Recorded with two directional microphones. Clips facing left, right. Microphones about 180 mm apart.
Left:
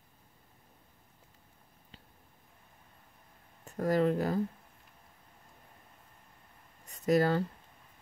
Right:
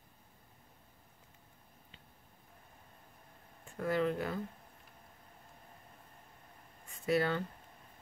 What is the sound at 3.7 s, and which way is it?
Speech, 40° left (ahead or behind).